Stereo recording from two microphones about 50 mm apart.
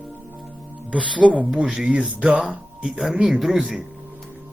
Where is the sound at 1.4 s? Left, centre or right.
Centre.